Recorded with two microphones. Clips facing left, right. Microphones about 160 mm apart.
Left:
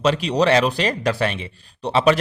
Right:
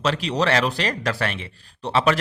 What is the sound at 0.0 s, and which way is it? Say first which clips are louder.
Speech: left 4 dB; 15° left (ahead or behind).